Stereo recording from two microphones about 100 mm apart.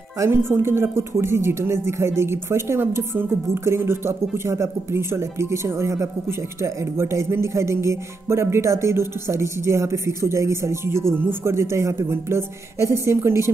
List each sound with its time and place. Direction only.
0.2 s speech: 25° right (ahead or behind)